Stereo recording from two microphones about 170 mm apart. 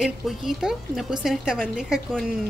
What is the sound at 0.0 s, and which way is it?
A woman's voice, 5° right (ahead or behind).